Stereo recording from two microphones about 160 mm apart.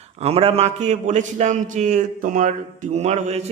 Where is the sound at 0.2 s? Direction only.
40° right (ahead or behind).